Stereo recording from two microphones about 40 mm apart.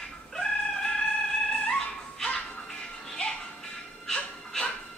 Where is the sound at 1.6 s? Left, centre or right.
Centre.